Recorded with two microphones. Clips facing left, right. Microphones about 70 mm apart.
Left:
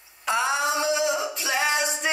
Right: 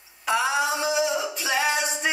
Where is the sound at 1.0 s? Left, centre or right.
Centre.